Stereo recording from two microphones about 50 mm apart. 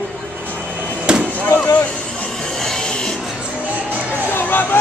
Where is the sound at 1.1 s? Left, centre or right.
Centre.